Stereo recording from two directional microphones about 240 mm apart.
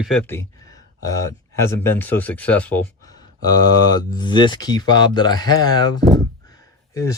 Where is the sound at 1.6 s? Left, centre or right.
Centre.